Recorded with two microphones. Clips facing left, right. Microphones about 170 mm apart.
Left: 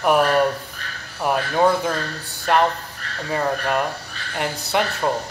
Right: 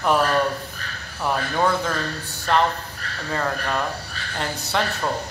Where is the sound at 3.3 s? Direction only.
15° left (ahead or behind).